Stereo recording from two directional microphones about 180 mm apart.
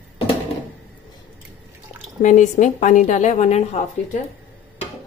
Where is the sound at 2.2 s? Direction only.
45° left (ahead or behind).